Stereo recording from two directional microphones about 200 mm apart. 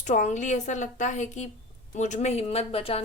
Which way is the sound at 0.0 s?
35° left (ahead or behind).